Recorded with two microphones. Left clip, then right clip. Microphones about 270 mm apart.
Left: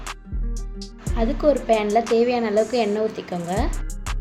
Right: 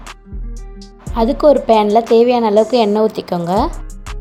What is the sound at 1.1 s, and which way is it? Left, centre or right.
A woman's voice, right.